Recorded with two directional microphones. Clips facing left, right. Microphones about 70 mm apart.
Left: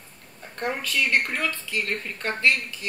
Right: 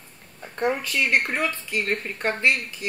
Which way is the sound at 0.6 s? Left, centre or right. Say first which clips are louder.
Right 3 dB; centre.